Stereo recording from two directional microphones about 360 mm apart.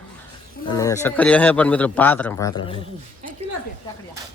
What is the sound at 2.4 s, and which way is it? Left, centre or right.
Speech, left.